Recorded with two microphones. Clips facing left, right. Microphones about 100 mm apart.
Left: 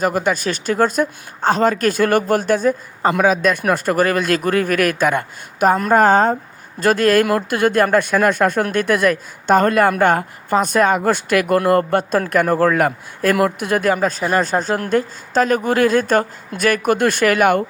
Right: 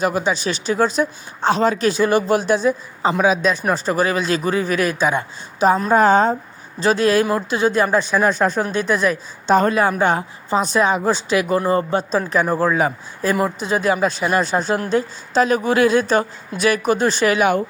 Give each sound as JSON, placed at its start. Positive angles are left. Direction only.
{"t": 0.0, "sound": "speech", "side_deg": 50}